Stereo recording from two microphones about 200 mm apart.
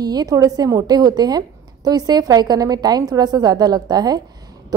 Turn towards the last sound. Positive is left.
turn(degrees=-20)  # may be behind; listen again after turning